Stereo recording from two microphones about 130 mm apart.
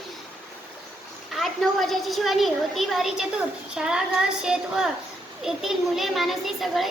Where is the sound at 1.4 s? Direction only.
Centre (ahead or behind).